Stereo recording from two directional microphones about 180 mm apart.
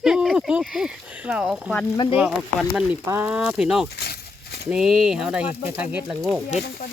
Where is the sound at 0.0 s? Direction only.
Centre (ahead or behind).